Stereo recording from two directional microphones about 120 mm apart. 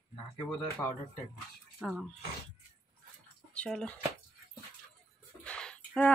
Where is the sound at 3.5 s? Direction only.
10° left (ahead or behind).